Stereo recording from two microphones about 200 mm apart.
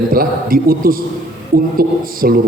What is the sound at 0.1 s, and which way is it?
A man's voice, 45° right (ahead or behind).